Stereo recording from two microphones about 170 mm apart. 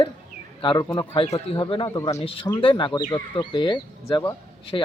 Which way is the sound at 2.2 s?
35° left (ahead or behind).